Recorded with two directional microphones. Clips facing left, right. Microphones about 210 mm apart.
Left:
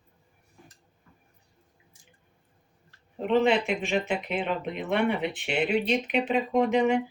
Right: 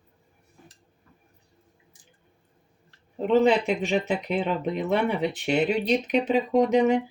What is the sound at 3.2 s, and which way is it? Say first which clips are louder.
Speech: right 3 dB; 40° right (ahead or behind).